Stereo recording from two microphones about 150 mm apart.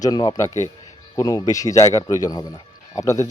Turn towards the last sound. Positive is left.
turn(degrees=20)  # may be behind; listen again after turning